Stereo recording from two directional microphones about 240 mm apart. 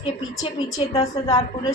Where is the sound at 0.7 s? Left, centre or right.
Centre.